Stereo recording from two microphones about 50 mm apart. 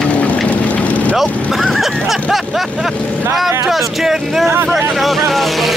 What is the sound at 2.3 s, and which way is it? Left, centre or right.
Speech, centre.